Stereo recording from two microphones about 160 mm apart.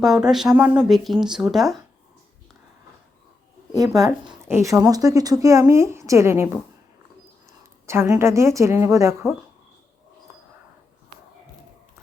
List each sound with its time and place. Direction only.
0.0 s speech: centre (ahead or behind)
3.7 s a woman's voice: 20° right (ahead or behind)
7.9 s a woman's voice: 15° right (ahead or behind)